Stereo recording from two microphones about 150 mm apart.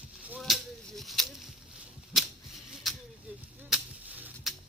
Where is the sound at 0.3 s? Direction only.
Centre (ahead or behind).